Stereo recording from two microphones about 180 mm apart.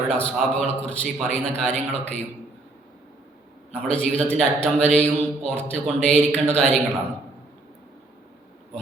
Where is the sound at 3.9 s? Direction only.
5° left (ahead or behind).